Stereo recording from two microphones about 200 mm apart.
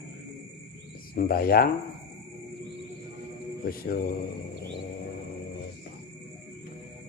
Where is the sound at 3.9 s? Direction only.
45° left (ahead or behind).